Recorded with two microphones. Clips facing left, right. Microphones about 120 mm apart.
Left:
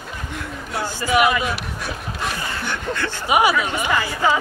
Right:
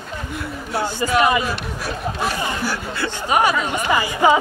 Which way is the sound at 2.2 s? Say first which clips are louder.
Right 3 dB; 5° right (ahead or behind).